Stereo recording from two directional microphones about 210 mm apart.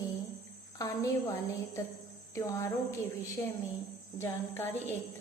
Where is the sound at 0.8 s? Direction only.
15° left (ahead or behind).